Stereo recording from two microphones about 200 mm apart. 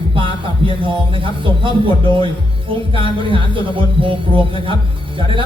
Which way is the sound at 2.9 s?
25° right (ahead or behind).